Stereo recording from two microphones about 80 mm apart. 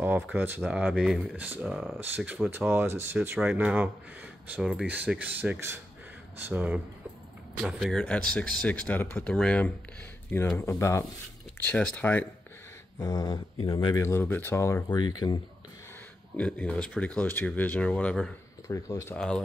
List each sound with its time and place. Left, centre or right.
0.0 s speech: right
1.7 s speech: centre
2.0 s speech: right
4.6 s speech: centre
7.5 s speech: centre
7.9 s speech: centre
10.6 s speech: left
11.6 s speech: centre
13.0 s speech: left
13.9 s speech: left
14.9 s speech: left
16.3 s speech: centre
18.7 s speech: left
19.1 s speech: centre